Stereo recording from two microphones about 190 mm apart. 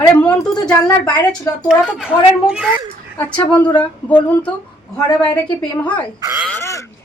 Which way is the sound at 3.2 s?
10° left (ahead or behind).